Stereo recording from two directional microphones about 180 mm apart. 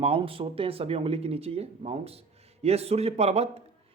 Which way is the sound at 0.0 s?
30° right (ahead or behind).